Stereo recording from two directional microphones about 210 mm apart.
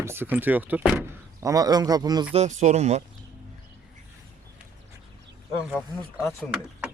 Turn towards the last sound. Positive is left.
turn(degrees=-5)  # may be behind; listen again after turning